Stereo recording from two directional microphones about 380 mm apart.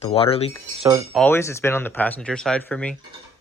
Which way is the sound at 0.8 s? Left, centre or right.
Centre.